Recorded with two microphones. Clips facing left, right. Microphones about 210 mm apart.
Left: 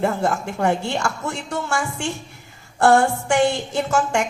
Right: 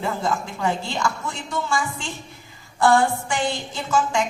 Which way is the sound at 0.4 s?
65° left (ahead or behind).